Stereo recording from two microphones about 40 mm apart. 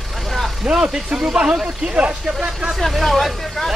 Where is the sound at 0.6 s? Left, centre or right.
Centre.